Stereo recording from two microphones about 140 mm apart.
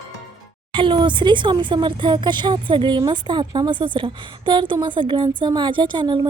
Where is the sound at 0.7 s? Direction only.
35° right (ahead or behind).